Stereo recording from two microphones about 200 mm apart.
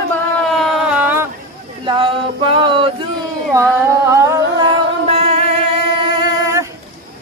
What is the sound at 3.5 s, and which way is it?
Singing, 15° right (ahead or behind).